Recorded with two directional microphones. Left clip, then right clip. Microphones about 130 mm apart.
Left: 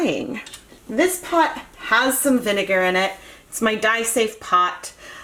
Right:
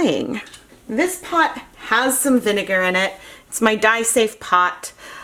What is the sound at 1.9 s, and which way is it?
Speech, 45° right (ahead or behind).